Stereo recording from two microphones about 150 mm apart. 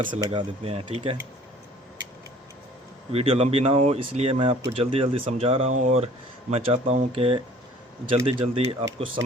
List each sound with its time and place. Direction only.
0.3 s speech: 40° right (ahead or behind)
3.1 s speech: 40° right (ahead or behind)
6.5 s speech: 40° right (ahead or behind)